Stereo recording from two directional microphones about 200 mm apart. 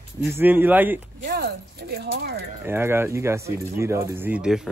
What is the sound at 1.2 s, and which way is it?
Speech, 50° right (ahead or behind).